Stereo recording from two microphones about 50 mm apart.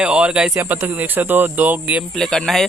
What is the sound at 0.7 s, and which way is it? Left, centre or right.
Speech, right.